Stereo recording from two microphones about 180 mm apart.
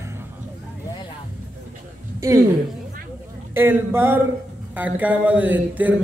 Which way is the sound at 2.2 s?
15° right (ahead or behind).